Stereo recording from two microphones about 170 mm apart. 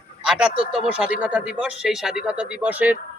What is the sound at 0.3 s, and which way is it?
Speech, 5° right (ahead or behind).